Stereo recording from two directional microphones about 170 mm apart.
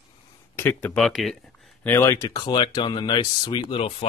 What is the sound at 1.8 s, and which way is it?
Speech, 15° left (ahead or behind).